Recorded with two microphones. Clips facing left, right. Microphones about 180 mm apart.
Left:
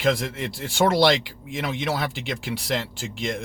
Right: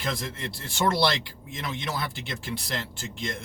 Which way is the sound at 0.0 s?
90° left.